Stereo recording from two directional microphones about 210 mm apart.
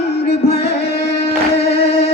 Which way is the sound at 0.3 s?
30° left (ahead or behind).